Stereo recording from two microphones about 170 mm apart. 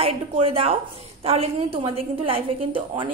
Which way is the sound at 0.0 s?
35° right (ahead or behind).